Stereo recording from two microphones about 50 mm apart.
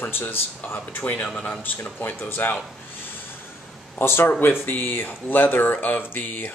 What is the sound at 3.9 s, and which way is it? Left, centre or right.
Speech, left.